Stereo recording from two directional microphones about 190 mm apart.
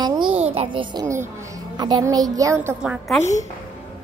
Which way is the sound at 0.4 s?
30° right (ahead or behind).